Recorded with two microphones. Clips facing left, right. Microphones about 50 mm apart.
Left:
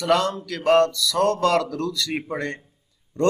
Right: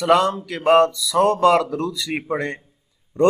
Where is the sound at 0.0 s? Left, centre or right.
Centre.